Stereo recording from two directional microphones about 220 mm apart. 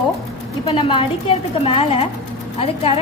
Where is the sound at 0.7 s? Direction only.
25° left (ahead or behind).